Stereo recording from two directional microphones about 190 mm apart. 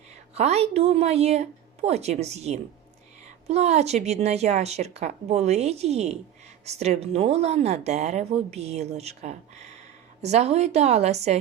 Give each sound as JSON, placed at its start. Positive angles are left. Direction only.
{"t": 0.3, "sound": "speech", "side_deg": -35}